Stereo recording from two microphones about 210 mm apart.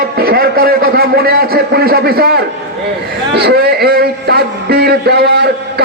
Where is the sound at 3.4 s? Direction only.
50° right (ahead or behind).